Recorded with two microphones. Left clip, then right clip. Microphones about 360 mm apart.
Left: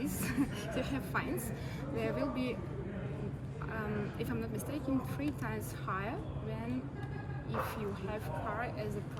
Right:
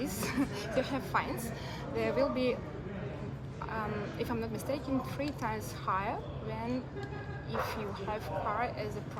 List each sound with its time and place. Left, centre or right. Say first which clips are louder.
0.0 s a sound: right 3 dB; centre
0.8 s speech: right 6 dB; centre
3.7 s a woman's voice: right 3 dB; centre
8.1 s speech: right 7 dB; centre